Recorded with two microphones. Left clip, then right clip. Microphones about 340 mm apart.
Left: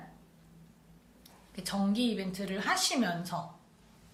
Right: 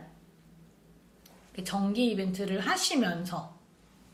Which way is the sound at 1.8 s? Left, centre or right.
Left.